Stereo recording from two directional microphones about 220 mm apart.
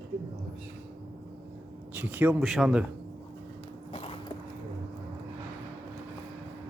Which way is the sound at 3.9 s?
25° left (ahead or behind).